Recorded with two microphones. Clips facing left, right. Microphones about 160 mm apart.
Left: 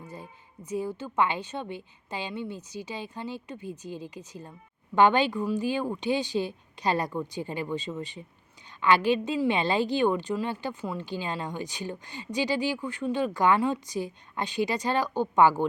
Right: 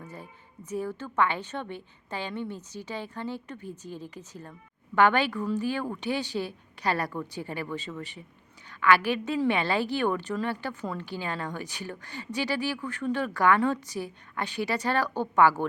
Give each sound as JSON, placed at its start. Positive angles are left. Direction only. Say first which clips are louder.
{"t": 0.0, "sound": "a woman's voice", "louder": "left 1 dB", "side_deg": 10}